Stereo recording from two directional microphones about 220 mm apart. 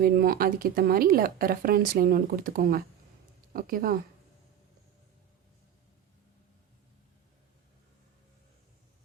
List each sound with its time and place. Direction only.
0.0 s speech: 40° right (ahead or behind)